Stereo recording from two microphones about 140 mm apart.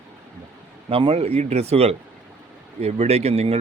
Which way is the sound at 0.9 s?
40° right (ahead or behind).